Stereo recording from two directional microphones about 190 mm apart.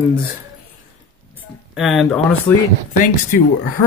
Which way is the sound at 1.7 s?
Centre (ahead or behind).